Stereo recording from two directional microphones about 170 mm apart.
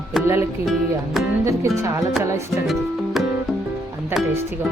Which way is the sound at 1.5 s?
20° right (ahead or behind).